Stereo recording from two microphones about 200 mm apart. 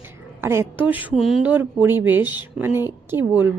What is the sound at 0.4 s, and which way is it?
Speech, 10° right (ahead or behind).